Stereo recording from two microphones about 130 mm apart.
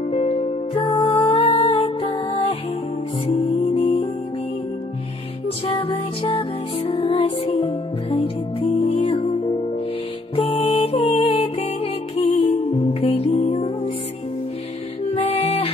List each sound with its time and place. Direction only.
0.1 s music: 50° left (ahead or behind)
5.7 s music: 40° left (ahead or behind)
15.1 s music: 55° left (ahead or behind)